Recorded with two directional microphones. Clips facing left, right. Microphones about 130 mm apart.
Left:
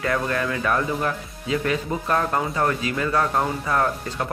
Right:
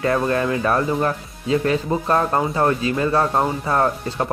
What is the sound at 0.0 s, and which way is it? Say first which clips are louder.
Speech: right 5 dB; 30° right (ahead or behind).